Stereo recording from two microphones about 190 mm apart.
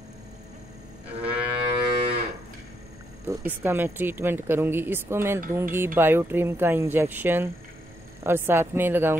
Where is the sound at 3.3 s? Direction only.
10° right (ahead or behind).